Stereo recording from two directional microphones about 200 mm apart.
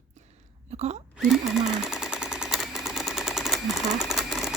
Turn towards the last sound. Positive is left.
turn(degrees=0)  # may be behind; listen again after turning